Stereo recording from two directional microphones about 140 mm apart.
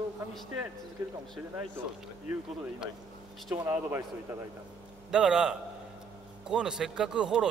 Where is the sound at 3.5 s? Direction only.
20° right (ahead or behind).